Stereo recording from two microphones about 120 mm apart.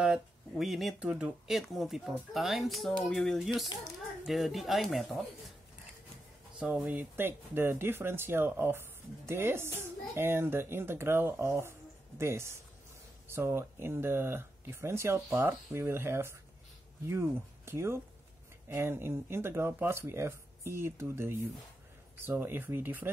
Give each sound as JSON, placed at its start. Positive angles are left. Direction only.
{"t": 0.0, "sound": "a sound", "side_deg": -5}
{"t": 0.9, "sound": "speech", "side_deg": -10}
{"t": 6.6, "sound": "speech", "side_deg": -10}